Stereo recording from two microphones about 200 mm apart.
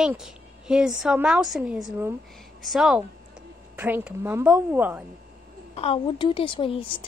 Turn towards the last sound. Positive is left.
turn(degrees=25)  # may be behind; listen again after turning